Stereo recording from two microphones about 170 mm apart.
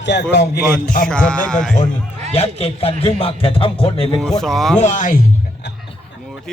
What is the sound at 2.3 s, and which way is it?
Speech, 35° left (ahead or behind).